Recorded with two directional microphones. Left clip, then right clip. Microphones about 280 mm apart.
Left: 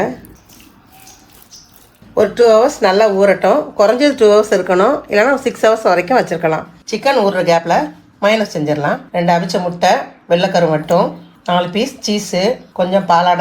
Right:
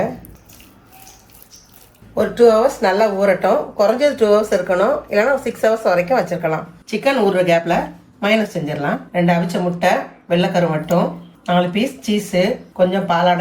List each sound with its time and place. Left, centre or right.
2.1 s speech: left
6.8 s speech: centre